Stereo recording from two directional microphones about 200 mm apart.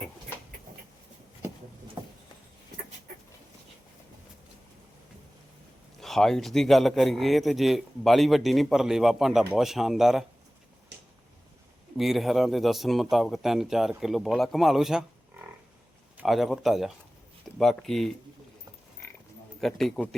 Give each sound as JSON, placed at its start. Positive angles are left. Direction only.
{"t": 2.0, "sound": "a sound", "side_deg": -20}
{"t": 6.0, "sound": "speech", "side_deg": 0}
{"t": 11.9, "sound": "speech", "side_deg": 0}
{"t": 19.6, "sound": "speech", "side_deg": 0}